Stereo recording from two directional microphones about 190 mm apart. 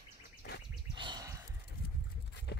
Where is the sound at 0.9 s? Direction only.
25° right (ahead or behind).